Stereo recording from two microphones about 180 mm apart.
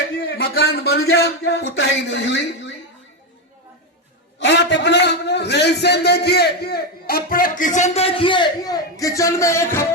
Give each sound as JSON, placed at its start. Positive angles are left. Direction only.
{"t": 0.2, "sound": "a man's voice", "side_deg": 55}
{"t": 4.4, "sound": "a man's voice", "side_deg": 75}